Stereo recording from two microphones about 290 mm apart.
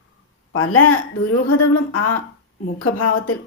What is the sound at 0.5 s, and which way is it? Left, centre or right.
Speech, left.